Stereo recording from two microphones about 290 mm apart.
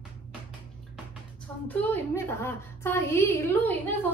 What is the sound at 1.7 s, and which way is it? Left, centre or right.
A woman's voice, centre.